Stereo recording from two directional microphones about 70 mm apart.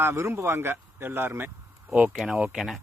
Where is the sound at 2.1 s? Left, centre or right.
Centre.